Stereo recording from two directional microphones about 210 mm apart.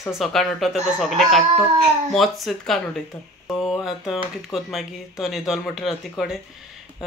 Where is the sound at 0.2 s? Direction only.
Centre (ahead or behind).